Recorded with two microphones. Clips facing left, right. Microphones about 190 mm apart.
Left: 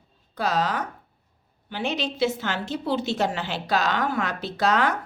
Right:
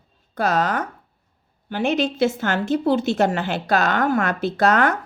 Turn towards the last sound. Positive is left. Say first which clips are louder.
# right 5 dB
turn(degrees=-50)  # may be behind; listen again after turning